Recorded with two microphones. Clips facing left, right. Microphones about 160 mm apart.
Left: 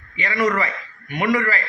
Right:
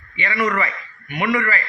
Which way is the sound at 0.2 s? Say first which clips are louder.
Left 1 dB; 40° left (ahead or behind).